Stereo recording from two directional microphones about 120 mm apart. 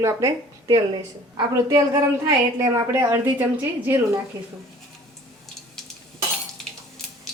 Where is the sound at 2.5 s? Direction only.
25° right (ahead or behind).